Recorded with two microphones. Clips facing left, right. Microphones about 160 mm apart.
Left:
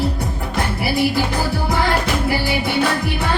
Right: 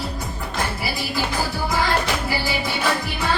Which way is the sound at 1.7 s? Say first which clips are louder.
Left 2 dB; 60° left (ahead or behind).